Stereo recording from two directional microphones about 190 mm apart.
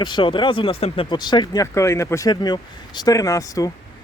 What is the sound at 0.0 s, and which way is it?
Speech, 25° left (ahead or behind).